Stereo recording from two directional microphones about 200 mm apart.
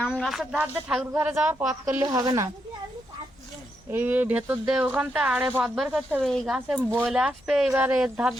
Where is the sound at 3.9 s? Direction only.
10° right (ahead or behind).